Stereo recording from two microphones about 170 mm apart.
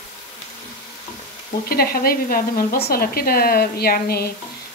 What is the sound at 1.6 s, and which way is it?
Speech, 65° left (ahead or behind).